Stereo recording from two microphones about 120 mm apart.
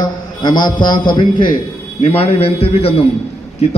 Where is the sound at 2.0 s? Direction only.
50° left (ahead or behind).